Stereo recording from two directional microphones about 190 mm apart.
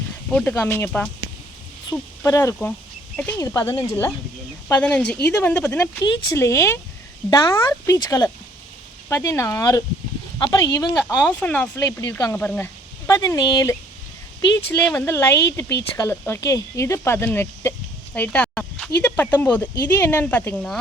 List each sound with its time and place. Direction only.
0.3 s speech: 10° left (ahead or behind)
6.1 s speech: 25° left (ahead or behind); by 20.7 s 10° left (ahead or behind)